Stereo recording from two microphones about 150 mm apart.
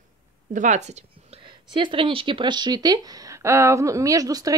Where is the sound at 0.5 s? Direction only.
55° right (ahead or behind).